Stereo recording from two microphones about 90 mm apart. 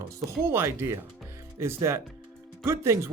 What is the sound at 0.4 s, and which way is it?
Speech, 30° right (ahead or behind).